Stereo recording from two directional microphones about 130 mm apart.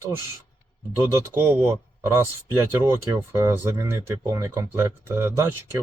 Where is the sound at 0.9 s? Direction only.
20° right (ahead or behind).